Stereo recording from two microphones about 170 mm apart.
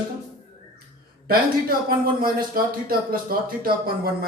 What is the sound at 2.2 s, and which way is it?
Speech, 60° right (ahead or behind).